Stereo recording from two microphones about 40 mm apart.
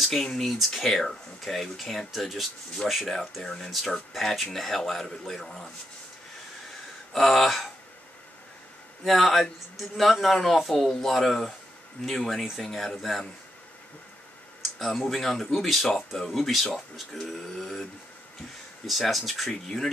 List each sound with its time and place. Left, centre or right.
0.0 s a man's voice: centre
3.4 s speech: centre
4.1 s speech: centre
7.1 s a man's voice: centre
9.0 s a man's voice: centre
14.6 s a man's voice: centre
18.9 s a man's voice: centre